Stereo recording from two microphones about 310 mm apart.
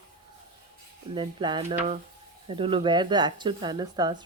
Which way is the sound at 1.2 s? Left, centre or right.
Centre.